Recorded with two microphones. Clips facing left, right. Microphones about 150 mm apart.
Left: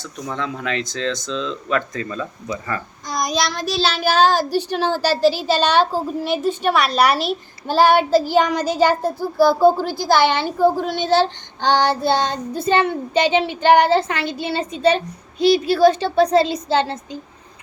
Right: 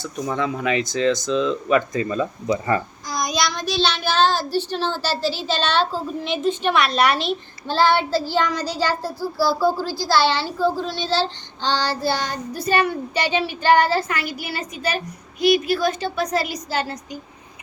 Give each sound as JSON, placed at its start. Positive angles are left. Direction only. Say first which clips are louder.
{"t": 0.0, "sound": "speech", "louder": "right 3 dB", "side_deg": -10}
{"t": 3.2, "sound": "a child's voice", "louder": "left 2 dB", "side_deg": 0}
{"t": 4.8, "sound": "a child's voice", "louder": "left 4 dB", "side_deg": 45}
{"t": 5.0, "sound": "a child's voice", "louder": "left 7 dB", "side_deg": 10}
{"t": 9.4, "sound": "child singing", "louder": "left 6 dB", "side_deg": 20}
{"t": 10.6, "sound": "a child's voice", "louder": "left 6 dB", "side_deg": 50}
{"t": 11.1, "sound": "child singing", "louder": "left 7 dB", "side_deg": 15}